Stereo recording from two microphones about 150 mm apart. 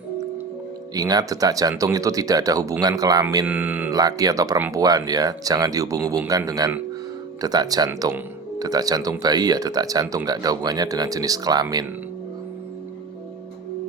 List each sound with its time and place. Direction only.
0.9 s speech: 25° right (ahead or behind)
3.4 s speech: 10° right (ahead or behind)
3.9 s speech: 25° right (ahead or behind)